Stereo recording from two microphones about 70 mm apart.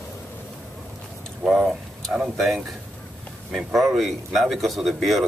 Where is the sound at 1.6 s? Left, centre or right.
Centre.